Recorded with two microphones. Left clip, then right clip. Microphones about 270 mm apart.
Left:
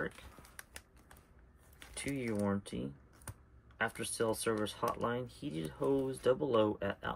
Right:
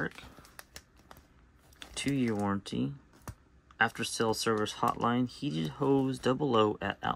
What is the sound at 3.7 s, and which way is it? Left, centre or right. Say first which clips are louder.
Speech: right 7 dB; centre.